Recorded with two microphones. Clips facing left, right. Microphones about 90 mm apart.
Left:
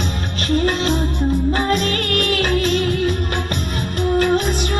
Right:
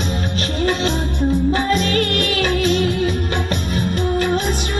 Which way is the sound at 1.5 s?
40° left (ahead or behind).